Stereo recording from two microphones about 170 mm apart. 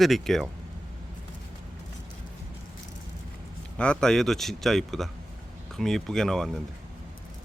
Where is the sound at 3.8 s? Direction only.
5° left (ahead or behind).